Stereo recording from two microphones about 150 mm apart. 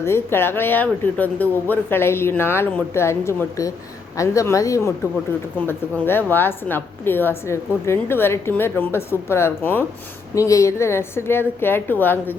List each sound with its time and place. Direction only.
0.0 s a woman's voice: 15° left (ahead or behind)